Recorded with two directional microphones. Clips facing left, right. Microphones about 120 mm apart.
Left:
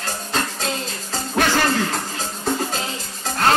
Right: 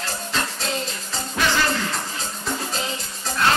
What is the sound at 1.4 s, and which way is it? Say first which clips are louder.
Music: left 4 dB; 50° left (ahead or behind).